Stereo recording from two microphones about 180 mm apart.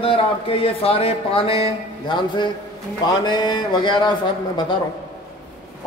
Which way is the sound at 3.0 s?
25° left (ahead or behind).